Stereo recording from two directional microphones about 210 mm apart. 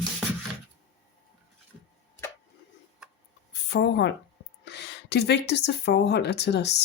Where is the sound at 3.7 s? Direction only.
55° left (ahead or behind).